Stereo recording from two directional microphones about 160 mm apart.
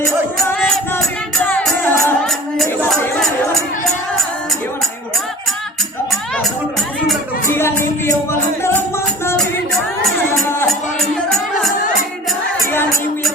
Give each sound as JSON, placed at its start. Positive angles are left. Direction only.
{"t": 1.5, "sound": "music", "side_deg": 10}
{"t": 6.1, "sound": "music", "side_deg": 0}
{"t": 7.4, "sound": "music", "side_deg": 15}